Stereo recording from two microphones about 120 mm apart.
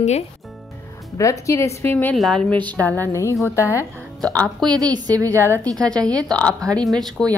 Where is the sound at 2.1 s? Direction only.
5° left (ahead or behind); by 3.8 s 25° left (ahead or behind).